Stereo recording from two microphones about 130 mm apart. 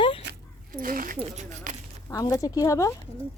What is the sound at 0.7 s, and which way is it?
Speech, 90° right.